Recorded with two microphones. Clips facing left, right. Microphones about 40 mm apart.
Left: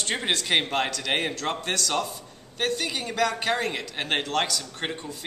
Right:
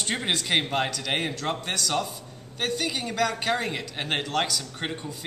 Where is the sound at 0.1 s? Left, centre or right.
Centre.